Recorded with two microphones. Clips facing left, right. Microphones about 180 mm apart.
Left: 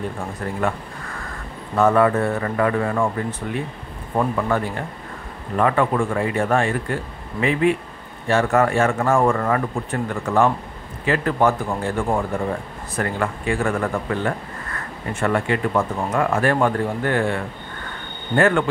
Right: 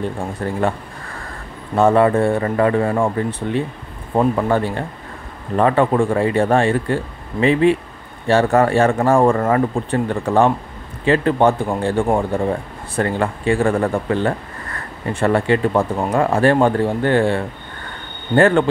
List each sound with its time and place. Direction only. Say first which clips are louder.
0.4 s speech: right 4 dB; 30° right (ahead or behind)
1.8 s speech: right 3 dB; 25° right (ahead or behind)